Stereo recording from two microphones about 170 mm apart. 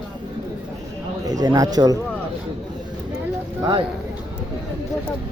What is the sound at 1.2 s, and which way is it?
Speech, 20° right (ahead or behind).